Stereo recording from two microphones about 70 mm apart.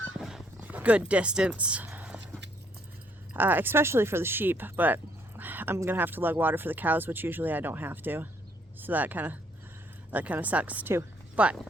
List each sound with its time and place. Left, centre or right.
0.2 s dog: centre
0.6 s speech: right
2.0 s a sound: centre
3.3 s speech: right
5.4 s a sound: right
5.9 s speech: right